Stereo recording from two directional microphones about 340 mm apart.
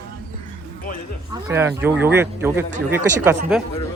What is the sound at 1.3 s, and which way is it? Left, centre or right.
Speech, centre.